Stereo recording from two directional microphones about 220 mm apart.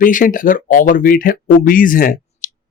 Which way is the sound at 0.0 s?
35° left (ahead or behind).